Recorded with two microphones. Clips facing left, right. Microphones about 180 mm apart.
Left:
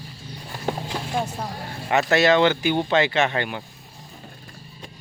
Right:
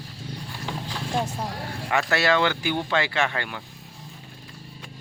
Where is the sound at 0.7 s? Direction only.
50° left (ahead or behind).